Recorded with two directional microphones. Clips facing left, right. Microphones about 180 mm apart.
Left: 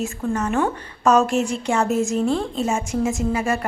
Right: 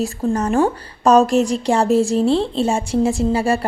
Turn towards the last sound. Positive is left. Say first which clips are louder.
# right 4 dB
turn(degrees=-30)  # may be behind; listen again after turning